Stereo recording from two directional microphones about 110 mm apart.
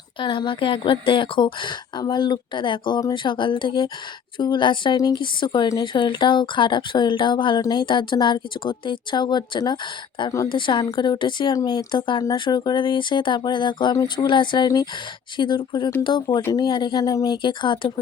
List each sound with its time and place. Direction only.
0.2 s speech: 45° left (ahead or behind)
12.2 s speech: 35° left (ahead or behind)
14.3 s speech: 45° left (ahead or behind)